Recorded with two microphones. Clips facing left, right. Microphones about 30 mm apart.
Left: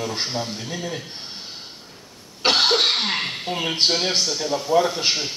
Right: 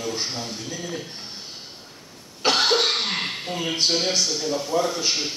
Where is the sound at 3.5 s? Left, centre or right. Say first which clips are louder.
Left 3 dB; left.